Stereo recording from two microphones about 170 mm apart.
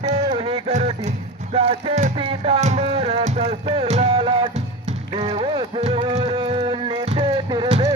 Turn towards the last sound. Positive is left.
turn(degrees=-30)  # may be behind; listen again after turning